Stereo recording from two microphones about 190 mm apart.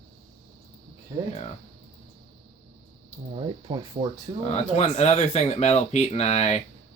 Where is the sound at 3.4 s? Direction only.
25° right (ahead or behind).